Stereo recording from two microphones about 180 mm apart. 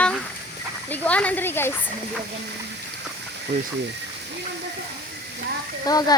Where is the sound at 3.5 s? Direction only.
70° right (ahead or behind).